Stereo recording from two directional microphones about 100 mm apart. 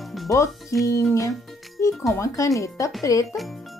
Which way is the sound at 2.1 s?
30° left (ahead or behind).